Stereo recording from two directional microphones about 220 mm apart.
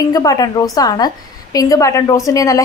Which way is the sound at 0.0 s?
15° left (ahead or behind).